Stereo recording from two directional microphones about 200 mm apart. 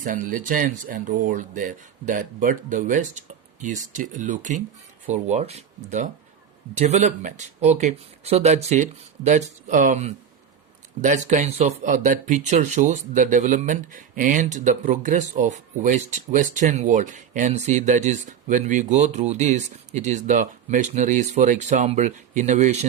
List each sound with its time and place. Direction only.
0.0 s speech: 40° right (ahead or behind)